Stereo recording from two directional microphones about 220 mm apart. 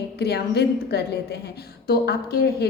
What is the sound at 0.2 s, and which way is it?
A woman's voice, 45° left (ahead or behind).